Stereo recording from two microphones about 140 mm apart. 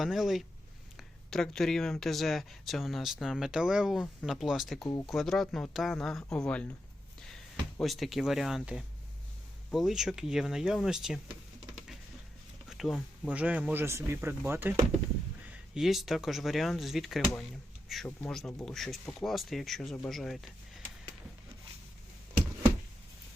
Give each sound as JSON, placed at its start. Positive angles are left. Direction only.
{"t": 0.0, "sound": "speech", "side_deg": 0}
{"t": 7.8, "sound": "speech", "side_deg": 0}
{"t": 12.7, "sound": "speech", "side_deg": 0}
{"t": 15.7, "sound": "speech", "side_deg": 0}